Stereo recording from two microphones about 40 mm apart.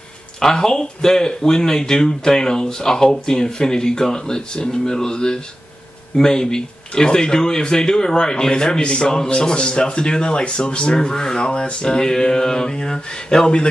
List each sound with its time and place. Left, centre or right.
0.4 s speech: centre